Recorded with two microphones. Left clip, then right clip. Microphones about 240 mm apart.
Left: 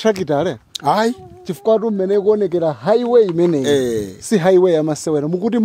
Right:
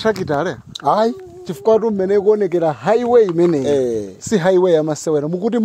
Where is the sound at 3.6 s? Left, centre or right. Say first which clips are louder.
Even; left.